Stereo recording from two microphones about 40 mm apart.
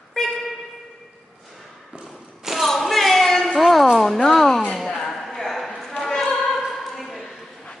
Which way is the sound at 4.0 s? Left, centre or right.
Centre.